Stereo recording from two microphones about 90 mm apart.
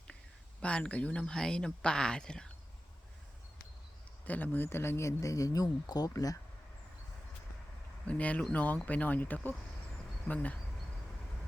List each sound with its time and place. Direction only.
0.6 s speech: 10° left (ahead or behind)
4.3 s speech: 20° left (ahead or behind); by 6.4 s 40° left (ahead or behind)
8.0 s speech: 15° left (ahead or behind)